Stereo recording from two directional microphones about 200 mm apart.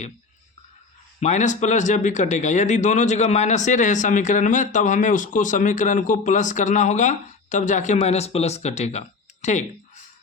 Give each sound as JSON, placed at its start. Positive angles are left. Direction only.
{"t": 1.2, "sound": "speech", "side_deg": 35}